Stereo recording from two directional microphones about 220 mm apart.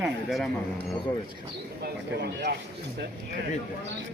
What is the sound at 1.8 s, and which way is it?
Speech, 50° right (ahead or behind).